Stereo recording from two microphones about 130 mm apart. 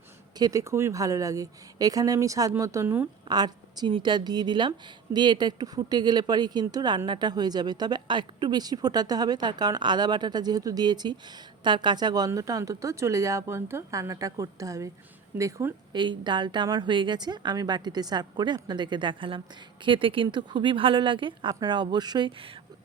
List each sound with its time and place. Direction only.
0.3 s a woman's voice: 30° right (ahead or behind)
3.2 s a woman's voice: 30° right (ahead or behind)
15.9 s speech: 35° right (ahead or behind)